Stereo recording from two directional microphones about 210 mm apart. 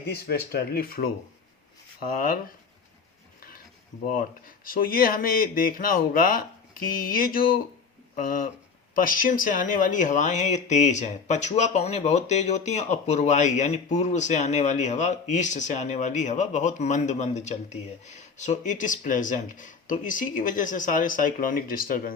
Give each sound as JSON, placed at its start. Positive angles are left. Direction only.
{"t": 0.3, "sound": "speech", "side_deg": 45}
{"t": 2.1, "sound": "speech", "side_deg": 45}
{"t": 4.1, "sound": "speech", "side_deg": 40}